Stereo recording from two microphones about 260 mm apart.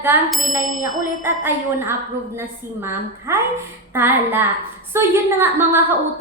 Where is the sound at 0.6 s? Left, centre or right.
Left.